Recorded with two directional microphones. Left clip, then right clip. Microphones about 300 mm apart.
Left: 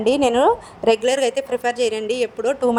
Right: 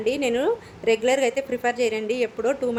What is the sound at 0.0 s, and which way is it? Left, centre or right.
A woman's voice, centre.